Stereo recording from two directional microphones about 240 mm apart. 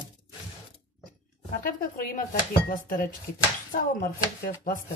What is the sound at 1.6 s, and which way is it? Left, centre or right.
Speech, left.